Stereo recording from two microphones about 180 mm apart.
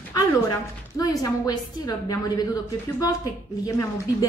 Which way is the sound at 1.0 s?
20° left (ahead or behind).